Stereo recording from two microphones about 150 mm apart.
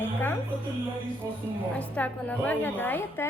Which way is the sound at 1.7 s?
10° left (ahead or behind).